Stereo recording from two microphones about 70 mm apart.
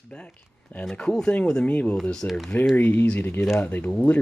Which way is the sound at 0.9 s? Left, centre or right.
Centre.